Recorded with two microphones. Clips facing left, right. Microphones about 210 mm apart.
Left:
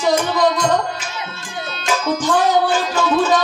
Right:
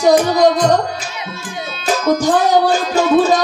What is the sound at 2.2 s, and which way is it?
Music, 40° right (ahead or behind).